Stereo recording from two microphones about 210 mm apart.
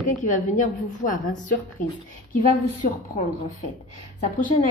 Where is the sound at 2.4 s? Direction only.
35° left (ahead or behind).